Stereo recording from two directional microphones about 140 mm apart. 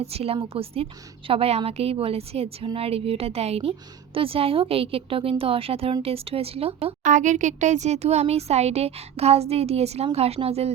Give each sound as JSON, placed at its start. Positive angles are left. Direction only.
{"t": 0.0, "sound": "a woman's voice", "side_deg": -45}
{"t": 7.0, "sound": "a woman's voice", "side_deg": -65}